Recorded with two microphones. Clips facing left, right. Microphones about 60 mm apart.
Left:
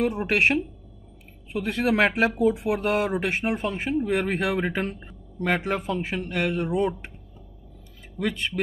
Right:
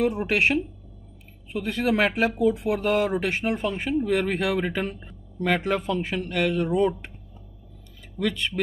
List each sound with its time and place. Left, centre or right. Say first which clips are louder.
0.3 s speech: left 1 dB; left
2.2 s speech: even; left
8.2 s speech: right 1 dB; left